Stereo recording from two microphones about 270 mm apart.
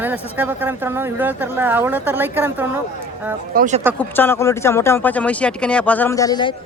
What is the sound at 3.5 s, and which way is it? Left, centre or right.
Speech, right.